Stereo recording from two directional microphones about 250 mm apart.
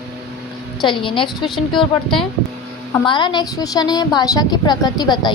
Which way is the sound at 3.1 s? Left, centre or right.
Centre.